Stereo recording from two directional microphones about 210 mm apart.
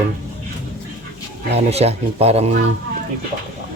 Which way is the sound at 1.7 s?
30° right (ahead or behind).